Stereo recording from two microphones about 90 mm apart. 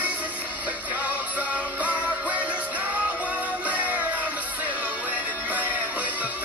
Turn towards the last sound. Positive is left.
turn(degrees=-15)  # may be behind; listen again after turning